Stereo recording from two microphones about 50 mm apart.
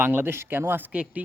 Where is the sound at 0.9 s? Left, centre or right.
Right.